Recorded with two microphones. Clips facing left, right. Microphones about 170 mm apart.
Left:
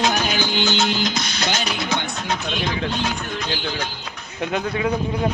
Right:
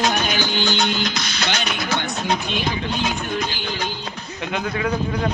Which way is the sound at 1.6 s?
25° left (ahead or behind).